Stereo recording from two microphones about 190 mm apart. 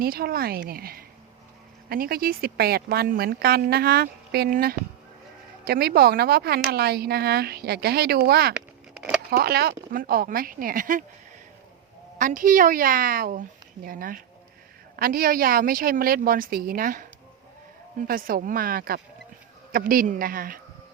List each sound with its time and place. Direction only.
0.0 s speech: 50° right (ahead or behind)
8.5 s a sound: 5° right (ahead or behind)
9.3 s speech: 55° right (ahead or behind)
12.2 s speech: 45° right (ahead or behind)
18.1 s speech: 50° right (ahead or behind)